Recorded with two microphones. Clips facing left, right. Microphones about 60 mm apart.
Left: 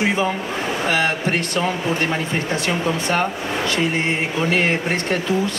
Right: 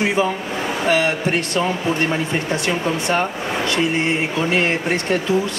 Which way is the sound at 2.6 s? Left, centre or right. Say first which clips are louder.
Right 1 dB; right.